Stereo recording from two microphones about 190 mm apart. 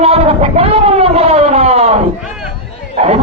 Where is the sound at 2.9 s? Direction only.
35° right (ahead or behind).